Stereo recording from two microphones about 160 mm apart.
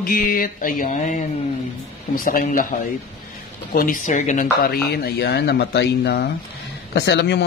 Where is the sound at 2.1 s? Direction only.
60° left (ahead or behind).